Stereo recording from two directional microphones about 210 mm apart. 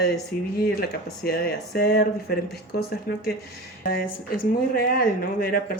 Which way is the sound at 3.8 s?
45° left (ahead or behind).